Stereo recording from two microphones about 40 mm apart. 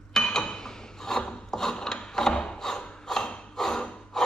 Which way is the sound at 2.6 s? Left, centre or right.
Centre.